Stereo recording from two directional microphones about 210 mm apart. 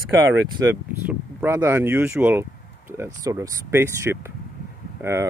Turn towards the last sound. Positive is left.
turn(degrees=-15)  # may be behind; listen again after turning